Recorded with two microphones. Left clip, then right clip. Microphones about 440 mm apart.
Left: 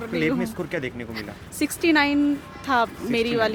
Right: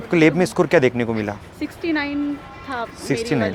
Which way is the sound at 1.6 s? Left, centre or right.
Left.